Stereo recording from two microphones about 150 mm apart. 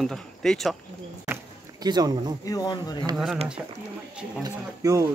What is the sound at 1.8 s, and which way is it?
Speech, 25° right (ahead or behind).